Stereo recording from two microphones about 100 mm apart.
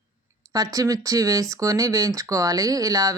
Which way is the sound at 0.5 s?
35° right (ahead or behind).